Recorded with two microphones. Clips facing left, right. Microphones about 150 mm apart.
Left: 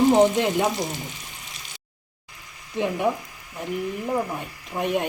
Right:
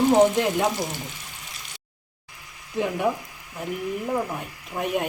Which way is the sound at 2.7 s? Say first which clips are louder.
Left 1 dB; centre (ahead or behind).